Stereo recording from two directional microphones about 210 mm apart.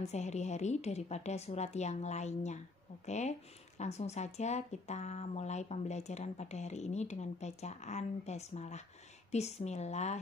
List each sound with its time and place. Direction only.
0.0 s speech: 30° left (ahead or behind)